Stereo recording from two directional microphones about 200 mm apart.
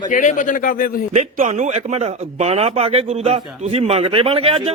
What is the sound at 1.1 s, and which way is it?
A man's voice, 35° right (ahead or behind).